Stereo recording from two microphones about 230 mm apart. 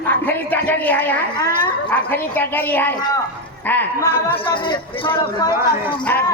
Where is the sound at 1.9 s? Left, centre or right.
Centre.